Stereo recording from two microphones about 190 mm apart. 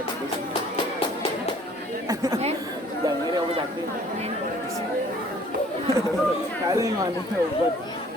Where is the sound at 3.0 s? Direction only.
20° right (ahead or behind).